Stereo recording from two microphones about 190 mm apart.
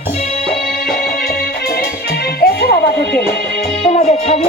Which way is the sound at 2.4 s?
55° left (ahead or behind).